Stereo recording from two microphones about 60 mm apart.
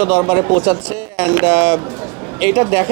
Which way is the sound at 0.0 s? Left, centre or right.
Right.